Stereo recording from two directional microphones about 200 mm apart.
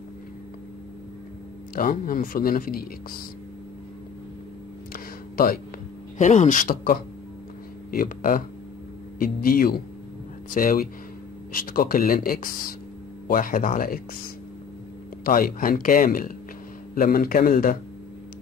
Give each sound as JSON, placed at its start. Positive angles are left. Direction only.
{"t": 1.8, "sound": "speech", "side_deg": 45}
{"t": 4.9, "sound": "a sound", "side_deg": 45}
{"t": 6.1, "sound": "a man's voice", "side_deg": 35}
{"t": 15.2, "sound": "speech", "side_deg": 45}